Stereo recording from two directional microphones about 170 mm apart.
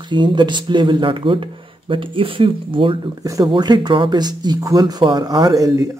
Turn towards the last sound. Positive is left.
turn(degrees=-20)  # may be behind; listen again after turning